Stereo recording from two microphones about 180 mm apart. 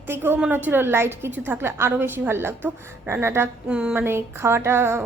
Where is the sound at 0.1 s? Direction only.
10° right (ahead or behind).